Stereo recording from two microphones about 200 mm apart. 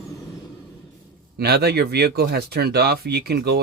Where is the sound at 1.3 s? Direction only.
55° right (ahead or behind).